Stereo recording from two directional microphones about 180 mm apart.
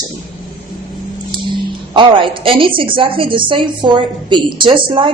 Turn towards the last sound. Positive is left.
turn(degrees=-30)  # may be behind; listen again after turning